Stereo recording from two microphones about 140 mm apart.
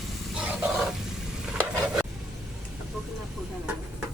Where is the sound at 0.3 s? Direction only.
5° right (ahead or behind).